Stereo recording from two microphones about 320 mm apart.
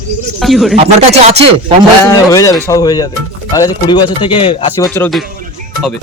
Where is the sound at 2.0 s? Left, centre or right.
Centre.